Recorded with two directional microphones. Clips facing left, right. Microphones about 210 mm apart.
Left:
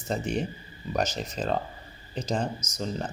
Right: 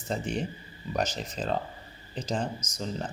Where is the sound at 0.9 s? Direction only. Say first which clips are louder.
Left 2 dB; 40° left (ahead or behind).